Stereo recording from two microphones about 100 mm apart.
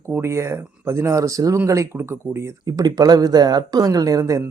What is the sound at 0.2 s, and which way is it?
Speech, 30° right (ahead or behind).